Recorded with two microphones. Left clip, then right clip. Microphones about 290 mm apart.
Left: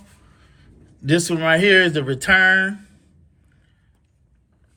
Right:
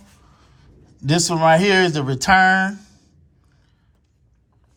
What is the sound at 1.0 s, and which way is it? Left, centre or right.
Speech, centre.